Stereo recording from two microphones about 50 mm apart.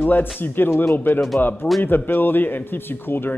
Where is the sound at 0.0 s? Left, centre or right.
Left.